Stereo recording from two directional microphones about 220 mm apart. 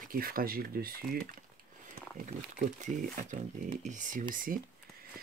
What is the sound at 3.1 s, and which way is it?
Speech, 35° right (ahead or behind).